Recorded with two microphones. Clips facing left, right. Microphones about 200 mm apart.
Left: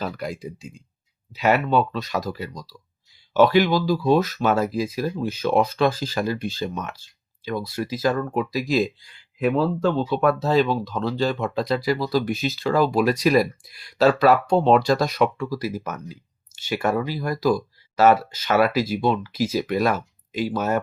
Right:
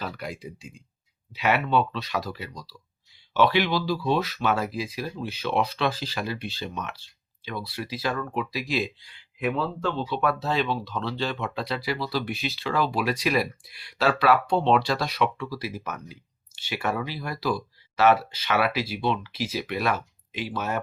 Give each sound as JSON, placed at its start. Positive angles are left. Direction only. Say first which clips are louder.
{"t": 0.0, "sound": "speech", "louder": "left 5 dB", "side_deg": 40}